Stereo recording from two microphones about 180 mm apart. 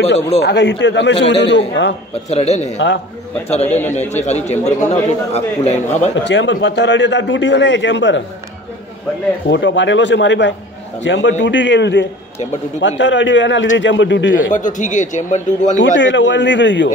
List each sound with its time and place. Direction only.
0.4 s a man's voice: 70° left (ahead or behind)
2.2 s a man's voice: 40° left (ahead or behind)
3.6 s speech: 10° left (ahead or behind)
4.1 s a man's voice: 40° left (ahead or behind)
6.2 s a man's voice: 80° left
9.5 s a man's voice: 85° left
14.5 s a man's voice: 45° left (ahead or behind)
15.8 s a man's voice: 85° left